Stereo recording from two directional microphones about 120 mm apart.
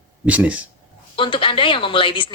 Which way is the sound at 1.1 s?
45° left (ahead or behind).